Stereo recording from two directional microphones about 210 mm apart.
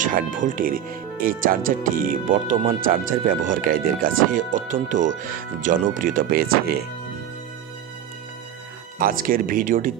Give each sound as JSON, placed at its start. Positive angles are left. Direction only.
{"t": 0.0, "sound": "speech", "side_deg": -40}
{"t": 8.9, "sound": "speech", "side_deg": -40}